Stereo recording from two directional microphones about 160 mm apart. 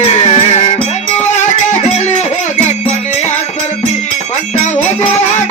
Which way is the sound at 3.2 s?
45° left (ahead or behind).